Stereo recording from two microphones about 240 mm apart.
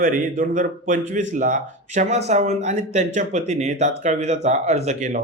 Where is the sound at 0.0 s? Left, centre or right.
Right.